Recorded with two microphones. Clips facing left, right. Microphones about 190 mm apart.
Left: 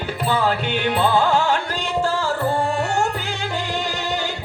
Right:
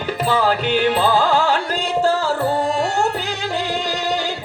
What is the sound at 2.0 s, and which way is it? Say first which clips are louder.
Tabla: right 4 dB; 40° right (ahead or behind).